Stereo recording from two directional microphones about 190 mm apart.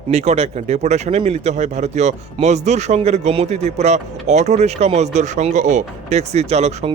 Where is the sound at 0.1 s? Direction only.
35° right (ahead or behind).